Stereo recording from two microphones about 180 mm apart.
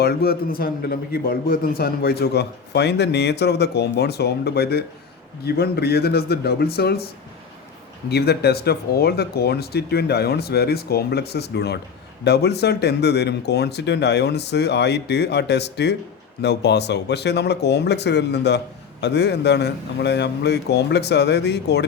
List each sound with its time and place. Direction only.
0.0 s a man's voice: 60° left (ahead or behind)
8.1 s a man's voice: 65° left (ahead or behind)